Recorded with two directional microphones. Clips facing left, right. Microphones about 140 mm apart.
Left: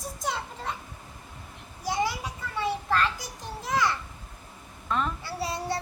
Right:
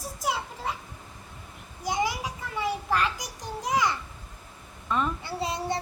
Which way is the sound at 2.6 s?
15° right (ahead or behind).